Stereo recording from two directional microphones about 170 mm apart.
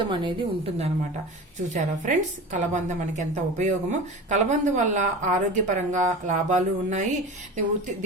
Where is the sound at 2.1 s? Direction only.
45° right (ahead or behind).